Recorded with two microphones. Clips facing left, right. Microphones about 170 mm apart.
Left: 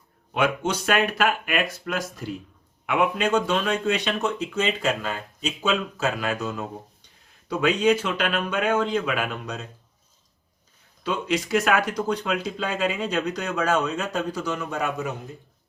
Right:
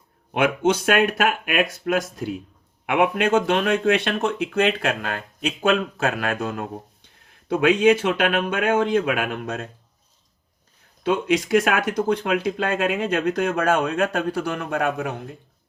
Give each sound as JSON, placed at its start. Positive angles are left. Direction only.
{"t": 0.3, "sound": "speech", "side_deg": -55}
{"t": 11.0, "sound": "speech", "side_deg": -55}